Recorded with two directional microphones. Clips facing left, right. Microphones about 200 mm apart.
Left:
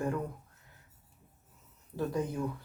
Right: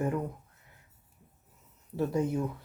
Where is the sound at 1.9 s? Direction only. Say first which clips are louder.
Right 4 dB; 25° right (ahead or behind).